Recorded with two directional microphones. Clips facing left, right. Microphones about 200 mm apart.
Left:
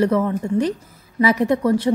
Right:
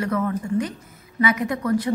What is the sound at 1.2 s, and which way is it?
Speech, 30° left (ahead or behind).